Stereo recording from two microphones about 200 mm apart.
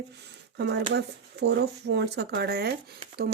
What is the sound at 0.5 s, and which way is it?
Speech, 60° right (ahead or behind).